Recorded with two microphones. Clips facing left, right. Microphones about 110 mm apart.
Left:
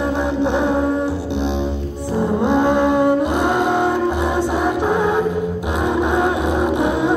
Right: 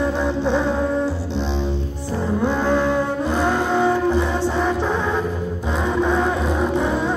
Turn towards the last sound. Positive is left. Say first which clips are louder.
# left 3 dB
turn(degrees=15)  # may be behind; listen again after turning